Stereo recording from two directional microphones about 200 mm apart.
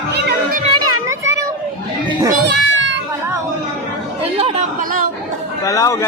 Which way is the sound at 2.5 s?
70° right (ahead or behind).